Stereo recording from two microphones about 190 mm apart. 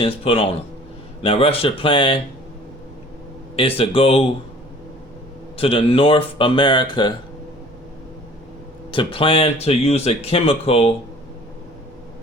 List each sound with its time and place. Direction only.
0.0 s speech: 30° left (ahead or behind)
3.5 s speech: 30° left (ahead or behind)
5.5 s speech: 30° left (ahead or behind)
8.9 s speech: 25° left (ahead or behind)